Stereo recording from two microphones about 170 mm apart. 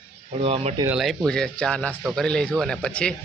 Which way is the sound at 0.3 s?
35° right (ahead or behind).